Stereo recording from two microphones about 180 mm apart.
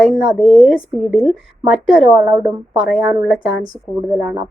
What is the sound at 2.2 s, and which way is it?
Speech, 30° right (ahead or behind).